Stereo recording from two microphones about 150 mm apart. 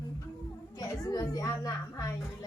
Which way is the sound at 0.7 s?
25° left (ahead or behind).